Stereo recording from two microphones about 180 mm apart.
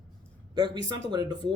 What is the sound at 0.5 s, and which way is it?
Speech, 25° right (ahead or behind).